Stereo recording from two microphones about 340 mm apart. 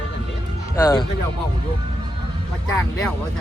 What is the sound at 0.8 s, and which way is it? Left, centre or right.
Speech, centre.